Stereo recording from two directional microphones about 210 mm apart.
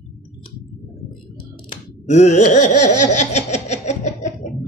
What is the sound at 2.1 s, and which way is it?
Laughter, 35° left (ahead or behind).